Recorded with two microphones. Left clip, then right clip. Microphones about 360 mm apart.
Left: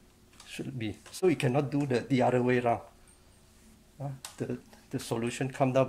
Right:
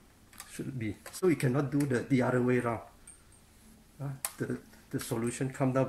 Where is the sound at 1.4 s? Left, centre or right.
Left.